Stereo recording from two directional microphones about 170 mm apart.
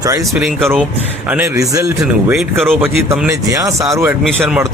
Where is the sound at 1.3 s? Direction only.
15° right (ahead or behind).